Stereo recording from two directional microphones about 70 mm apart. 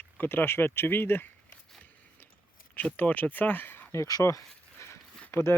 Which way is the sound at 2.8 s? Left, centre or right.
Left.